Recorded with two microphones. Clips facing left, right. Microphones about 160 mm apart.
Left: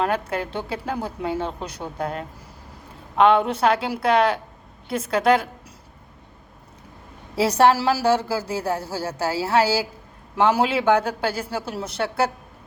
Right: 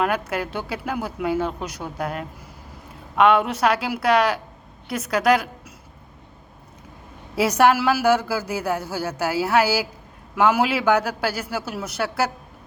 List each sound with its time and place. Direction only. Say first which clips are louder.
0.0 s a woman's voice: even; 25° left (ahead or behind)
7.3 s a woman's voice: even; 30° left (ahead or behind)